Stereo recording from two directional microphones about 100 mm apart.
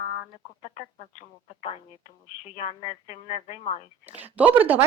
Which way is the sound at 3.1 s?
90° left.